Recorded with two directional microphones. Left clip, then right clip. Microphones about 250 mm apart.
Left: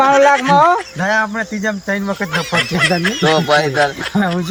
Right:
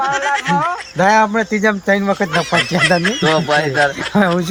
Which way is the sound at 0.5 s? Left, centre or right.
Right.